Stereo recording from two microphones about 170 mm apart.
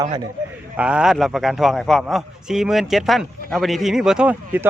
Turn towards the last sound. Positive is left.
turn(degrees=-10)  # may be behind; listen again after turning